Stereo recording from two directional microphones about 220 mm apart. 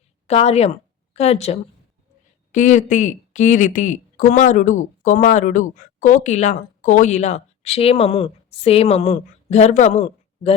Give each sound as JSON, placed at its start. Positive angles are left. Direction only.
{"t": 0.3, "sound": "a woman's voice", "side_deg": 30}